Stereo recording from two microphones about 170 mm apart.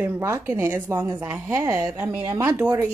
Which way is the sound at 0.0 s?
15° right (ahead or behind).